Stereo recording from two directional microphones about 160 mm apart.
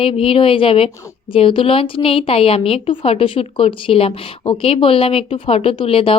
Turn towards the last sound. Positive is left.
turn(degrees=35)  # may be behind; listen again after turning